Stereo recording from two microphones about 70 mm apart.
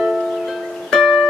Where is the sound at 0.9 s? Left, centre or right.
Centre.